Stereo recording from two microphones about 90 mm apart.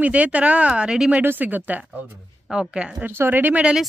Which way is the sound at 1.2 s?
20° right (ahead or behind).